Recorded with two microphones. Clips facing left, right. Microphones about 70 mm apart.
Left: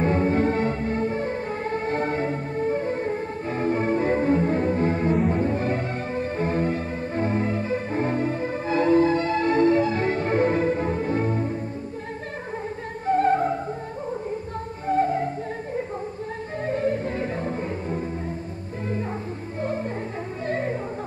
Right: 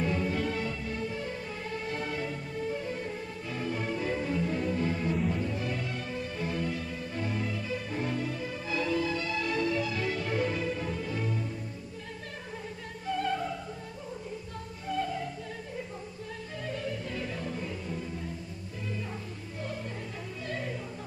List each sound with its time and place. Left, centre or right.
0.0 s music: left
13.0 s opera: left
14.9 s music: left
19.6 s music: left